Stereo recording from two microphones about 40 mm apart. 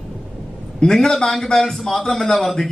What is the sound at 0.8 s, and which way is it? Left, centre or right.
A man's voice, centre.